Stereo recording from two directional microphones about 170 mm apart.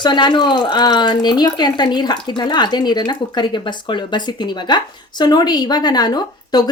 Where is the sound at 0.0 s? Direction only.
25° left (ahead or behind).